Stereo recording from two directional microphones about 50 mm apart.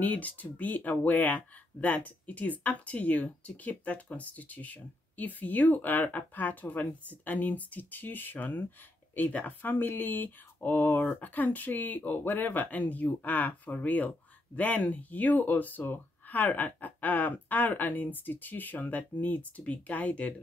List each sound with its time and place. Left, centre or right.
0.0 s speech: left